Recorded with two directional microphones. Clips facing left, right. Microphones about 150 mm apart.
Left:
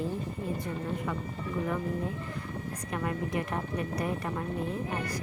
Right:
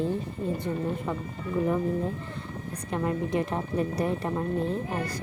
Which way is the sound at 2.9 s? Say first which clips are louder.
Right 5 dB; 25° right (ahead or behind).